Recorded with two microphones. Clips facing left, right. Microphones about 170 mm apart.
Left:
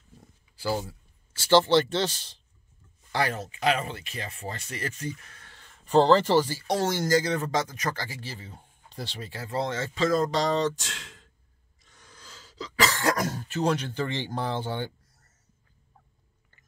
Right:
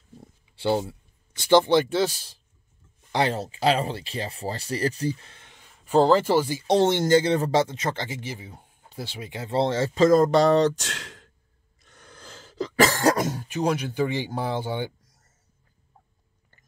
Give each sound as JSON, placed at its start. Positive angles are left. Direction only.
{"t": 0.2, "sound": "speech", "side_deg": -25}
{"t": 3.1, "sound": "speech", "side_deg": -20}
{"t": 3.3, "sound": "speech", "side_deg": -35}
{"t": 6.7, "sound": "speech", "side_deg": -25}
{"t": 11.8, "sound": "throat clearing", "side_deg": -60}
{"t": 13.1, "sound": "throat clearing", "side_deg": -20}
{"t": 13.4, "sound": "speech", "side_deg": -10}